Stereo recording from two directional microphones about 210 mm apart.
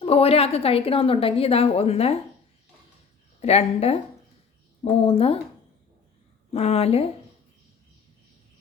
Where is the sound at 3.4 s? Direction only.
30° left (ahead or behind).